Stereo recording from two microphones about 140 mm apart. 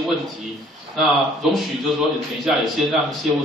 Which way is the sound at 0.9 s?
Centre (ahead or behind).